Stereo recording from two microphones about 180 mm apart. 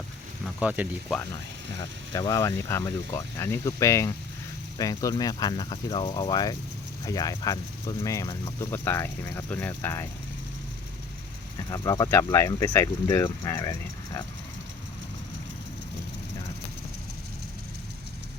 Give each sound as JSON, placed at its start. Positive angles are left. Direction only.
{"t": 0.4, "sound": "a sound", "side_deg": -5}
{"t": 2.1, "sound": "speech", "side_deg": 20}
{"t": 11.7, "sound": "speech", "side_deg": 20}